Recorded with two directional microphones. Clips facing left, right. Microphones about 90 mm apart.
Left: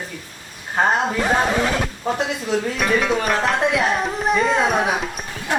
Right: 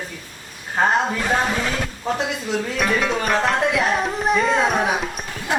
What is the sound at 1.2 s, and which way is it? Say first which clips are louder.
Speech: left 3 dB; 15° left (ahead or behind).